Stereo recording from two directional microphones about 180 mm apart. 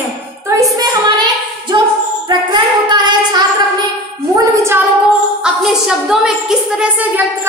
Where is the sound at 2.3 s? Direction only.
25° right (ahead or behind).